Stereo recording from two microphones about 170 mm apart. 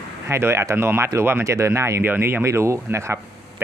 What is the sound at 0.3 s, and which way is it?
Speech, 15° right (ahead or behind).